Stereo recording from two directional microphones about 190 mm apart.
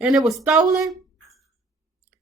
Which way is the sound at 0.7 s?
Centre (ahead or behind).